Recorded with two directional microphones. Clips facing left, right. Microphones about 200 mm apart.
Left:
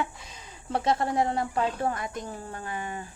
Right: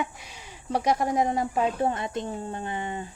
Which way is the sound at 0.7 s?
15° right (ahead or behind).